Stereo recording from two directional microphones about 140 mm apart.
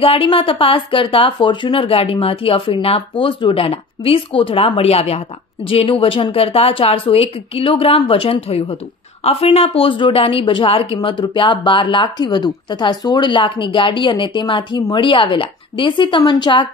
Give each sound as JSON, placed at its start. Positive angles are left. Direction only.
{"t": 0.0, "sound": "speech", "side_deg": 40}